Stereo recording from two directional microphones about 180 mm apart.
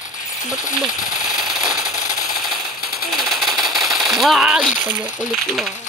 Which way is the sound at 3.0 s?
Centre (ahead or behind).